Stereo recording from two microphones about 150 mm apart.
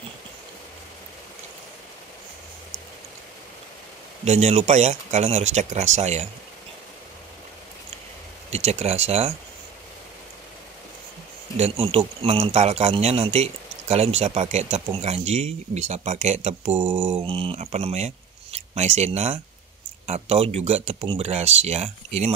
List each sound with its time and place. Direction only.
4.2 s speech: 45° right (ahead or behind)
8.5 s speech: 45° right (ahead or behind)
11.5 s speech: 45° right (ahead or behind)